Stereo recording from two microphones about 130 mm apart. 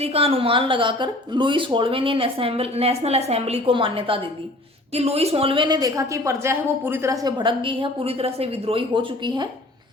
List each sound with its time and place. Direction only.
0.0 s speech: 50° right (ahead or behind)
5.6 s a woman's voice: 30° right (ahead or behind)